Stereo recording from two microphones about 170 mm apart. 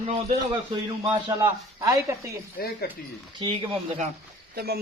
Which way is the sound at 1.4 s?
15° right (ahead or behind).